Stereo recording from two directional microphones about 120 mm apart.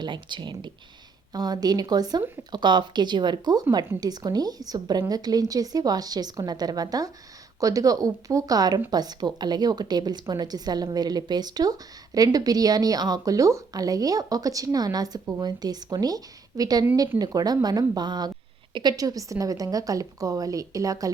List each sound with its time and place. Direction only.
0.0 s a woman's voice: 40° right (ahead or behind)
16.8 s a woman's voice: 20° right (ahead or behind)